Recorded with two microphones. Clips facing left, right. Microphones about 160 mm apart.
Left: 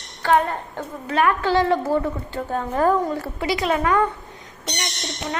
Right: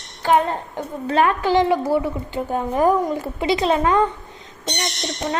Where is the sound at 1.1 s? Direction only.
25° right (ahead or behind).